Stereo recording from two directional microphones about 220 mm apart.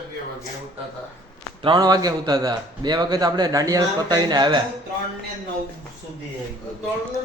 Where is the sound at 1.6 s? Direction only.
20° right (ahead or behind).